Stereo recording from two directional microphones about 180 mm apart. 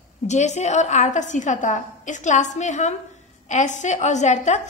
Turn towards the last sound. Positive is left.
turn(degrees=40)  # may be behind; listen again after turning